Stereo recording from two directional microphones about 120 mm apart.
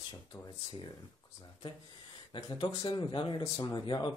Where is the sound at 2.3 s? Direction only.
40° left (ahead or behind).